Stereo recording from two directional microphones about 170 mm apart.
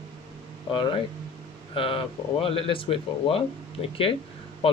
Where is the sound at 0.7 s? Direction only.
30° left (ahead or behind).